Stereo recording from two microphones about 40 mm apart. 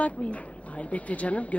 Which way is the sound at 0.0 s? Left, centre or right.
Left.